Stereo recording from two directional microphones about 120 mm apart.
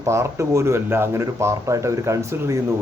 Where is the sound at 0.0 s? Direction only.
25° right (ahead or behind).